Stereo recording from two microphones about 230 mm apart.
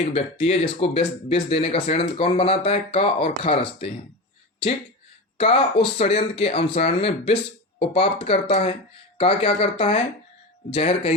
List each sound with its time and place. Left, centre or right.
0.0 s speech: left
5.4 s speech: left